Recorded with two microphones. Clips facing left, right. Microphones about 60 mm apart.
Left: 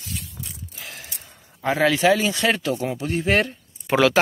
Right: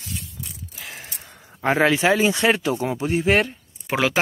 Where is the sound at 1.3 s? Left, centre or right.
Right.